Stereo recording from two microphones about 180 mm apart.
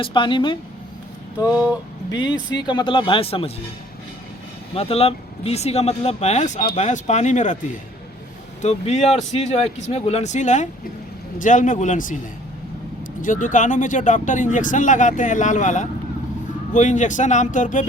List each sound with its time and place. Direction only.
0.0 s speech: 25° left (ahead or behind)
2.6 s speech: 25° left (ahead or behind)
4.7 s speech: 35° left (ahead or behind)
8.6 s speech: 40° left (ahead or behind)